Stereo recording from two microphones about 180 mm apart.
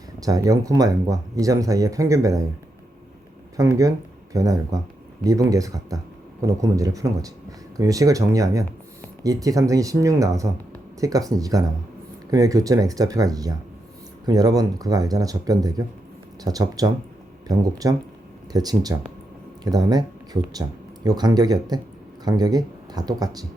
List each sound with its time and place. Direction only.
0.2 s speech: 20° right (ahead or behind)
3.6 s speech: 20° right (ahead or behind)